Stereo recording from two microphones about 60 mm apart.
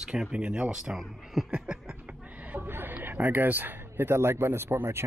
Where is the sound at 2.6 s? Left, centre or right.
Right.